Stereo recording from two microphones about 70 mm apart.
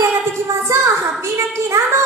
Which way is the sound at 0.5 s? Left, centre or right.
Right.